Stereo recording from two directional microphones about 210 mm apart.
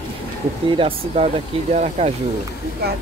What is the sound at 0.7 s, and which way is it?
Speech, 25° right (ahead or behind).